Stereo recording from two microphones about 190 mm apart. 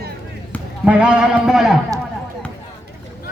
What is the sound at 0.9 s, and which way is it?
Speech, 5° right (ahead or behind).